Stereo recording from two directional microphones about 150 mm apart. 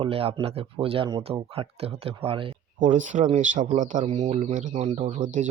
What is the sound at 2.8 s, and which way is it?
Speech, 55° right (ahead or behind).